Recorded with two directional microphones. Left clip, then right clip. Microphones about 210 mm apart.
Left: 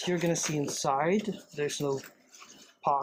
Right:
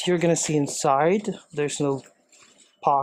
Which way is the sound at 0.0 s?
50° right (ahead or behind).